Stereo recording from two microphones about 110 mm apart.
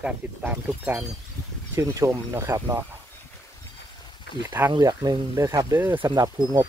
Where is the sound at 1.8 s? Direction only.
25° right (ahead or behind).